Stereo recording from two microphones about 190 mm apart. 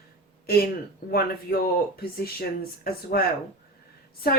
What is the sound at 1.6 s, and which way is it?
Speech, 55° left (ahead or behind).